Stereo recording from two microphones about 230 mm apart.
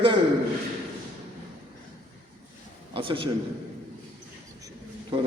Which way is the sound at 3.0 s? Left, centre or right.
Right.